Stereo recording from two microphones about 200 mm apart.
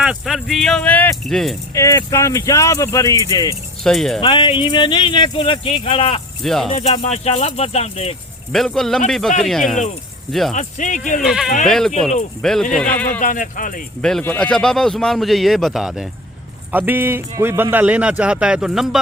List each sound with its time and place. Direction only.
0.0 s speech: 5° right (ahead or behind)
1.7 s speech: 15° left (ahead or behind)
3.8 s speech: centre (ahead or behind)
4.2 s speech: 25° left (ahead or behind)
6.4 s speech: centre (ahead or behind)
6.7 s speech: 30° left (ahead or behind)
8.5 s speech: centre (ahead or behind)
10.5 s speech: 40° left (ahead or behind)
11.2 s speech: centre (ahead or behind)
13.1 s speech: 40° left (ahead or behind)
14.0 s a man's voice: 5° left (ahead or behind)